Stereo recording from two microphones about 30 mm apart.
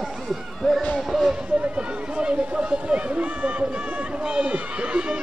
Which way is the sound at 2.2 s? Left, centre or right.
Right.